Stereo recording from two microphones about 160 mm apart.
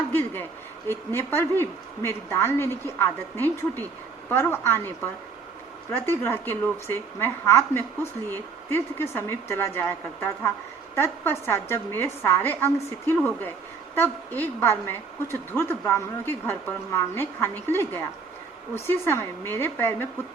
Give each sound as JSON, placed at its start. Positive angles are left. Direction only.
{"t": 0.1, "sound": "a sound", "side_deg": 10}
{"t": 0.9, "sound": "a woman's voice", "side_deg": 15}
{"t": 5.9, "sound": "a woman's voice", "side_deg": 15}